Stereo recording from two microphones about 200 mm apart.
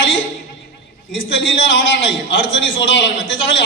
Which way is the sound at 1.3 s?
65° left (ahead or behind).